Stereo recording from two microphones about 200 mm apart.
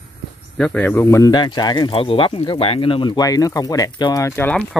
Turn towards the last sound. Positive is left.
turn(degrees=5)  # may be behind; listen again after turning